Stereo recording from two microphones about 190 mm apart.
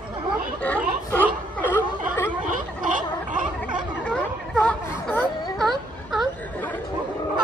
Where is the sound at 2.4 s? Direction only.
45° right (ahead or behind).